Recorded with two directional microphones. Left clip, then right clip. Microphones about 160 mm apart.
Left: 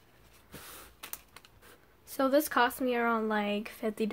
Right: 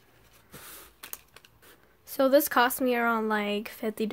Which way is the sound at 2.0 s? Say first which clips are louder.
Right 5 dB; 35° right (ahead or behind).